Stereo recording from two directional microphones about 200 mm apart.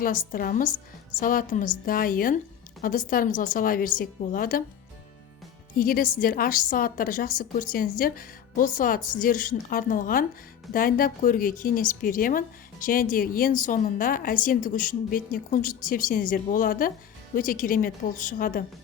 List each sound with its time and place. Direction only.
0.0 s a woman's voice: 45° left (ahead or behind)
5.7 s a woman's voice: 45° left (ahead or behind)